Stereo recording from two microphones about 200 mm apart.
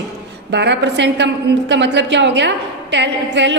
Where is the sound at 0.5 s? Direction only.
60° right (ahead or behind).